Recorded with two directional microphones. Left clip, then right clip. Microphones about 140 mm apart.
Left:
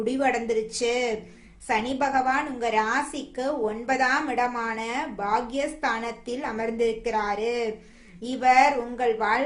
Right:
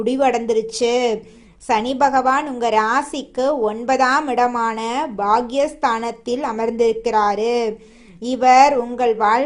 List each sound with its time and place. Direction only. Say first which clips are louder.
0.0 s a woman's voice: right 7 dB; 45° right (ahead or behind)